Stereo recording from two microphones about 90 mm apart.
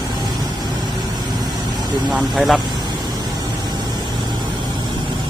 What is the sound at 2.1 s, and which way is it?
Speech, centre (ahead or behind).